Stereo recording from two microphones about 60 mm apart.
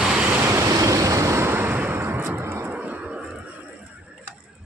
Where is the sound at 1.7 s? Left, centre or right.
Right.